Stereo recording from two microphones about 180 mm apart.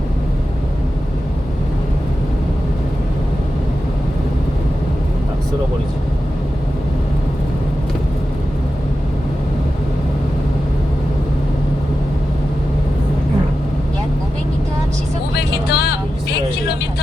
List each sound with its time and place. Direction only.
15.4 s vehicle: 65° left (ahead or behind)